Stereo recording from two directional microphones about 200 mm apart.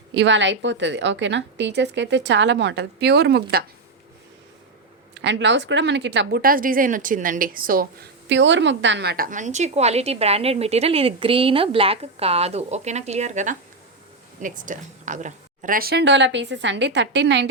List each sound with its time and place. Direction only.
0.1 s a woman's voice: 65° right (ahead or behind)
5.1 s speech: 60° right (ahead or behind); by 7.9 s 45° right (ahead or behind)
8.3 s a woman's voice: 65° right (ahead or behind)